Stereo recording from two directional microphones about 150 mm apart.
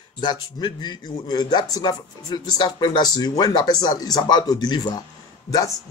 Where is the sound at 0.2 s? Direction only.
30° left (ahead or behind).